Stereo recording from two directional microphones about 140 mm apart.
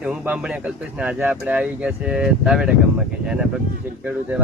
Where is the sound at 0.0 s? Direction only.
10° right (ahead or behind).